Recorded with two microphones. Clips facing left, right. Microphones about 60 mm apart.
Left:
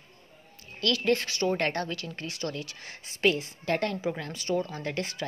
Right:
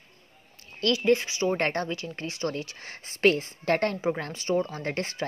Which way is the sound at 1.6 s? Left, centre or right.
Right.